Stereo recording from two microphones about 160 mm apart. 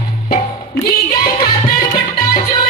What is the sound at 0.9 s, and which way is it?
Music, 70° left (ahead or behind).